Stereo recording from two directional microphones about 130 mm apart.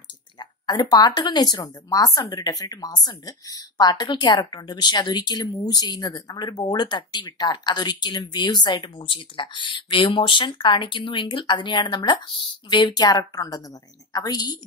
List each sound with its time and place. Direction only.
0.4 s speech: 30° left (ahead or behind)